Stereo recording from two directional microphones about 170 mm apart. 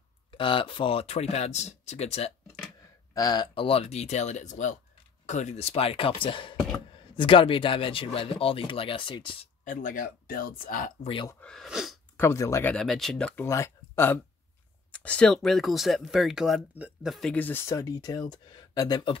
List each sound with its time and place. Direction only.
0.3 s speech: 30° left (ahead or behind)
3.2 s speech: 25° left (ahead or behind)
9.7 s speech: 50° left (ahead or behind)
11.4 s speech: centre (ahead or behind)
12.2 s speech: 15° left (ahead or behind)
12.7 s speech: centre (ahead or behind)
13.4 s speech: 15° left (ahead or behind)